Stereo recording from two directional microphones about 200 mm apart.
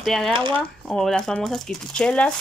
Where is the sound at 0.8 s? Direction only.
5° left (ahead or behind).